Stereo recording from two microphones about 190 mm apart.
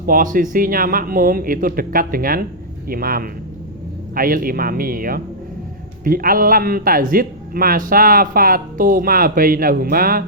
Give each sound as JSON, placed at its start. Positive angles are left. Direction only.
{"t": 0.0, "sound": "speech", "side_deg": -45}